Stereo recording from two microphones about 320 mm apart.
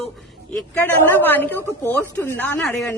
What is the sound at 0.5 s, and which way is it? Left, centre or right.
A woman's voice, centre.